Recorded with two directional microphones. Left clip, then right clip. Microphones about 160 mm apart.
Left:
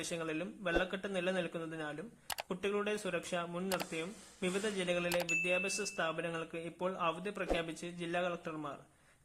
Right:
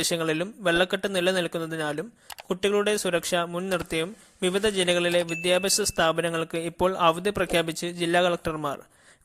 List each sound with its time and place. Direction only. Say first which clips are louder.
0.1 s speech: right 13 dB; 45° right (ahead or behind)